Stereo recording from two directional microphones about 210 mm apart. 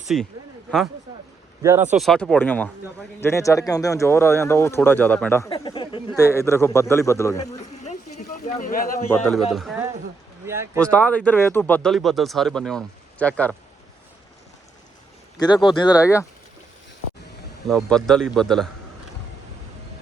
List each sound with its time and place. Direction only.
0.1 s speech: centre (ahead or behind)
1.6 s speech: 10° right (ahead or behind); by 5.5 s 10° left (ahead or behind)
5.5 s speech: 25° left (ahead or behind)
7.6 s a sound: 35° left (ahead or behind)
9.1 s speech: 5° left (ahead or behind)
10.4 s speech: 10° right (ahead or behind)
10.8 s speech: 5° left (ahead or behind)
15.4 s speech: 20° left (ahead or behind)
17.7 s speech: centre (ahead or behind)